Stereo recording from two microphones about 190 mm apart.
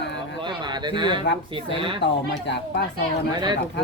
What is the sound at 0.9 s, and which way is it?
Speech, 25° right (ahead or behind).